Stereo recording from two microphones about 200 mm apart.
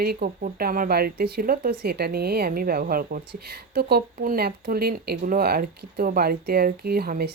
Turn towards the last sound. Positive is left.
turn(degrees=-50)  # may be behind; listen again after turning